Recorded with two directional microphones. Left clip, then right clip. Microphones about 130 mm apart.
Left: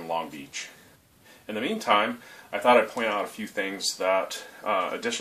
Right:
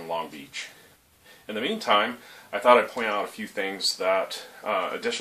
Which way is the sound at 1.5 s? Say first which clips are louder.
Right 1 dB; 20° right (ahead or behind).